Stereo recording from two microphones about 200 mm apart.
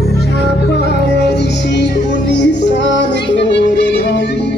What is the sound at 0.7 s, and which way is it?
Music, 55° left (ahead or behind).